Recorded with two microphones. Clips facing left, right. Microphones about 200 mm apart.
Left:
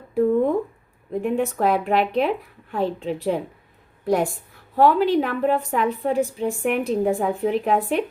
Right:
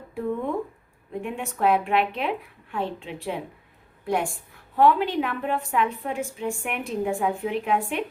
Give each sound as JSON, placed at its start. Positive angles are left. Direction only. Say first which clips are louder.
{"t": 1.2, "sound": "a woman's voice", "louder": "left 4 dB", "side_deg": 40}